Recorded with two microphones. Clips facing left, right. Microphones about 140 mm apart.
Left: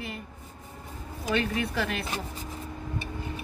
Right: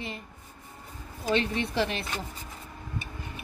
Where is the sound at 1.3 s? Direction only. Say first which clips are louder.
Right 1 dB; 25° right (ahead or behind).